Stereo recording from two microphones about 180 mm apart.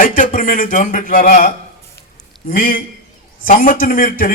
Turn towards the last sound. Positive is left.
turn(degrees=50)  # may be behind; listen again after turning